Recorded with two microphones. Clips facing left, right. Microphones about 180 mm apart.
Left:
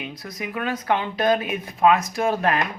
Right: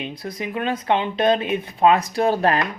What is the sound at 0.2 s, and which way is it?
Speech, 30° right (ahead or behind).